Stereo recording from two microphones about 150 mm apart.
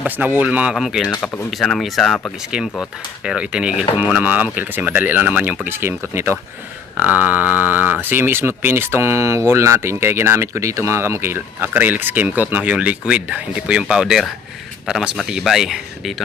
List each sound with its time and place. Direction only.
0.0 s speech: 10° right (ahead or behind); by 2.3 s 5° left (ahead or behind)
2.5 s speech: 5° right (ahead or behind)